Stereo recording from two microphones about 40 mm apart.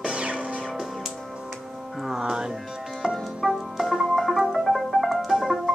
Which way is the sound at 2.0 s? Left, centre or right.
Centre.